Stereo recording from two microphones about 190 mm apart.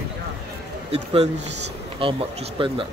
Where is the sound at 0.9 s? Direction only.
30° right (ahead or behind).